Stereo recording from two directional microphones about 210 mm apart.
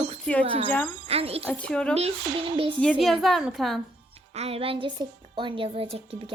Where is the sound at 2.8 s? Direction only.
5° left (ahead or behind).